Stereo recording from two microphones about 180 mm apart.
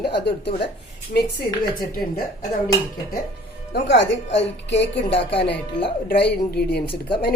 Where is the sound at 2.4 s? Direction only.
20° left (ahead or behind).